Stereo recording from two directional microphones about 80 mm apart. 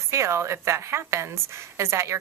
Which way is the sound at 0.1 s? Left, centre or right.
Right.